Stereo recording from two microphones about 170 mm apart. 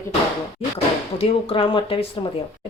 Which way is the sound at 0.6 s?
35° left (ahead or behind).